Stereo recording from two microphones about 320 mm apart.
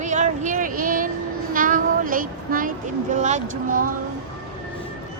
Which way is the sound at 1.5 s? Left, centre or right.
Right.